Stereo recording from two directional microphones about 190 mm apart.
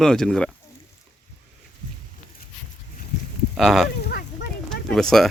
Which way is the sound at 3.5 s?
Centre (ahead or behind).